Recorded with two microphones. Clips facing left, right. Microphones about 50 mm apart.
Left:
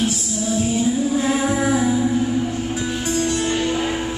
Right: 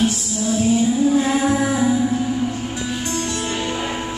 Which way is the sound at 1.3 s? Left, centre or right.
Centre.